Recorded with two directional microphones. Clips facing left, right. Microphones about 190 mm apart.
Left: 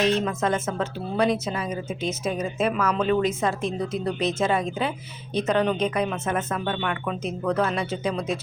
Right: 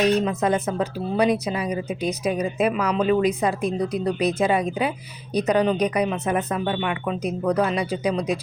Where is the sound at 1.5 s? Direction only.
15° right (ahead or behind).